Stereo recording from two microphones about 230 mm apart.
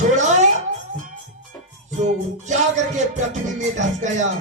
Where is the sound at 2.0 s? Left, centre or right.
Right.